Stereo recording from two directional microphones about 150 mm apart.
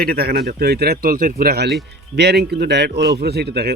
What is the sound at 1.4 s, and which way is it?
Speech, 90° right.